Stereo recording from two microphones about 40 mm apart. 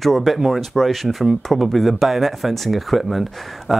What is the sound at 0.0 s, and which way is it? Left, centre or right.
A man's voice, centre.